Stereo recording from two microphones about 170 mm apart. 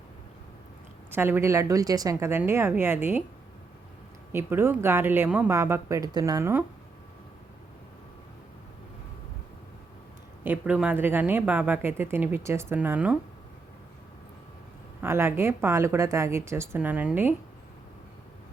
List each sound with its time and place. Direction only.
1.1 s speech: 15° right (ahead or behind)
4.3 s speech: 15° right (ahead or behind)
10.4 s speech: 10° right (ahead or behind)
15.0 s speech: 15° right (ahead or behind)